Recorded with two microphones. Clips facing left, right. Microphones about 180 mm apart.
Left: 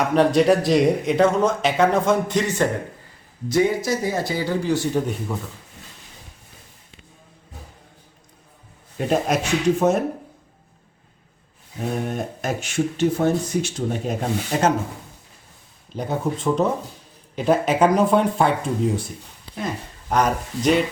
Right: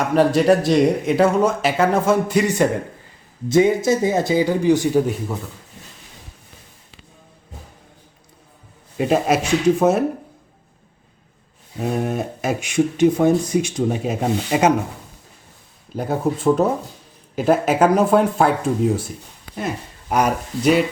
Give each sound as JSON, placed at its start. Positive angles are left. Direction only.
{"t": 0.0, "sound": "speech", "side_deg": 0}
{"t": 4.9, "sound": "speech", "side_deg": -5}
{"t": 9.0, "sound": "speech", "side_deg": -5}
{"t": 11.8, "sound": "speech", "side_deg": -5}
{"t": 16.0, "sound": "speech", "side_deg": -5}